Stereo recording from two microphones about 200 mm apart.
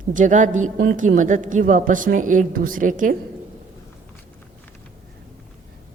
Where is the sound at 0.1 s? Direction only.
40° right (ahead or behind).